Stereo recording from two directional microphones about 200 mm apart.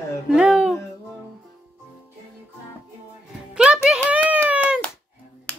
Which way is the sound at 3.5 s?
5° right (ahead or behind).